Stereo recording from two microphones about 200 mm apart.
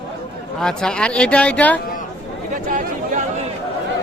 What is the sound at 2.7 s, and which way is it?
Chatter, 40° right (ahead or behind).